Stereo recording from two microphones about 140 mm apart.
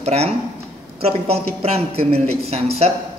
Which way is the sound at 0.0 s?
50° right (ahead or behind).